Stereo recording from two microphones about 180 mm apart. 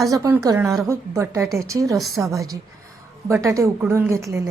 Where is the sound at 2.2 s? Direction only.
15° right (ahead or behind).